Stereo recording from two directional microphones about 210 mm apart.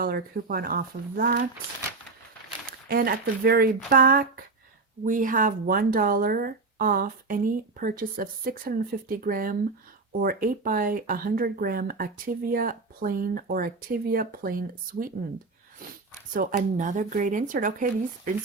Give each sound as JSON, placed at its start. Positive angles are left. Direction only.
{"t": 0.0, "sound": "speech", "side_deg": -45}
{"t": 2.6, "sound": "speech", "side_deg": -45}
{"t": 16.3, "sound": "speech", "side_deg": -40}